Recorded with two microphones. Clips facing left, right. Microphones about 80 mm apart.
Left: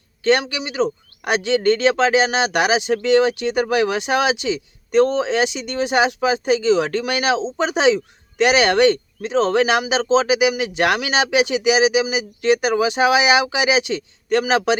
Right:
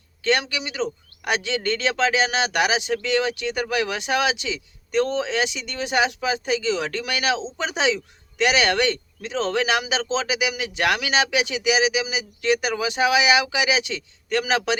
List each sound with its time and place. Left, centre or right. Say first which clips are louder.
0.3 s speech: left 5 dB; left